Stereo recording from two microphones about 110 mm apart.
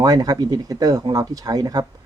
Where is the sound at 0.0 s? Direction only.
35° right (ahead or behind).